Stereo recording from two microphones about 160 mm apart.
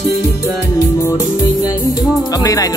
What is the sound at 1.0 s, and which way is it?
Music, 20° left (ahead or behind).